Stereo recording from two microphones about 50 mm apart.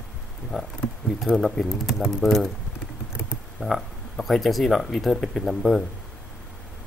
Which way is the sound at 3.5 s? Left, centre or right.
Centre.